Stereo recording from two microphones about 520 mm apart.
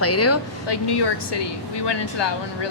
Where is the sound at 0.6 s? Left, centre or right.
Left.